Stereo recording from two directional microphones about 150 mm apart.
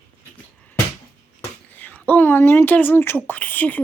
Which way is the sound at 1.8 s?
10° left (ahead or behind).